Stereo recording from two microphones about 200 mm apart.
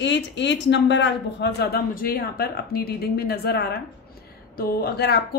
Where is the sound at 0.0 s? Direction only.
60° left (ahead or behind).